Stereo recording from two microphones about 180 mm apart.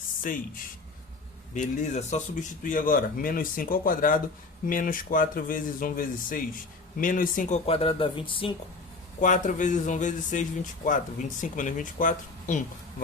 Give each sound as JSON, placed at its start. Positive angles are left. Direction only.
{"t": 0.3, "sound": "speech", "side_deg": 50}
{"t": 1.5, "sound": "speech", "side_deg": 40}
{"t": 9.2, "sound": "speech", "side_deg": 45}